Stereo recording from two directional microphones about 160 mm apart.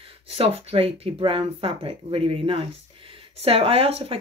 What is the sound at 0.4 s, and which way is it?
Speech, 35° right (ahead or behind).